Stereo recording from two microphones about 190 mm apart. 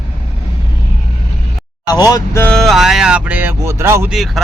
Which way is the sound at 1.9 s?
20° left (ahead or behind).